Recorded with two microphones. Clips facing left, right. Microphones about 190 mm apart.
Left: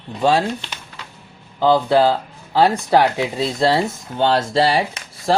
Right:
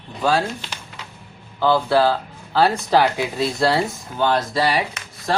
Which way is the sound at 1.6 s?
20° left (ahead or behind).